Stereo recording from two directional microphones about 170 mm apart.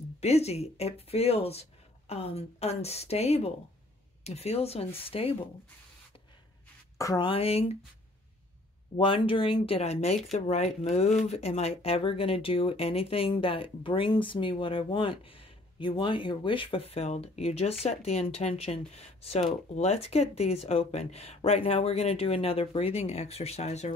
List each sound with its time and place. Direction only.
0.2 s speech: 40° left (ahead or behind)
7.0 s speech: 25° left (ahead or behind)
8.9 s speech: 30° left (ahead or behind)